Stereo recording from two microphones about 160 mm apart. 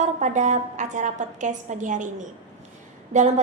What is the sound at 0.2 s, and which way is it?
A woman's voice, 50° right (ahead or behind).